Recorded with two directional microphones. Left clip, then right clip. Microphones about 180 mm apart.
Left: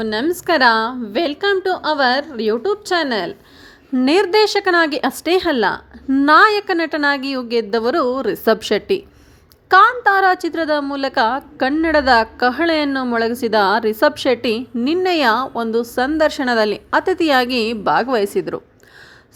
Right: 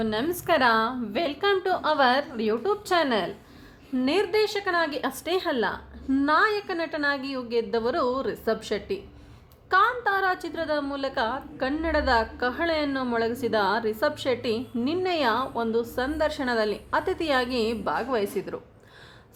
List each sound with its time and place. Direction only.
0.0 s a woman's voice: 30° left (ahead or behind)
3.9 s a woman's voice: 40° left (ahead or behind)